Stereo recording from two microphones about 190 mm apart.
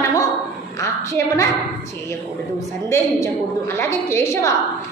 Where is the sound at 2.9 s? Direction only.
15° left (ahead or behind).